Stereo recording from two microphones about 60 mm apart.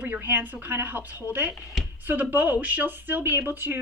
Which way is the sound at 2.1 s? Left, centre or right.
Right.